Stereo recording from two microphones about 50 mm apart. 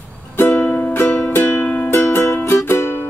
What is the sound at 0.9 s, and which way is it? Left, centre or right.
Music, left.